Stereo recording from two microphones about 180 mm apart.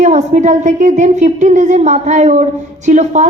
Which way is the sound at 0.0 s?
40° right (ahead or behind).